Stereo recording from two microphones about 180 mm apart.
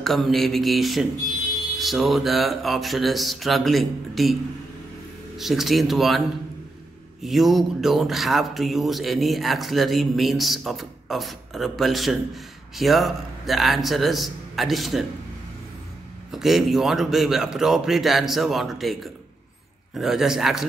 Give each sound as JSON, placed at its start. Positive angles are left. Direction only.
{"t": 0.0, "sound": "speech", "side_deg": 0}
{"t": 5.4, "sound": "speech", "side_deg": 0}
{"t": 7.2, "sound": "speech", "side_deg": 0}
{"t": 16.3, "sound": "speech", "side_deg": 0}